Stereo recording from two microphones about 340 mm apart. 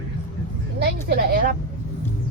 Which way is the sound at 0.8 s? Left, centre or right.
Right.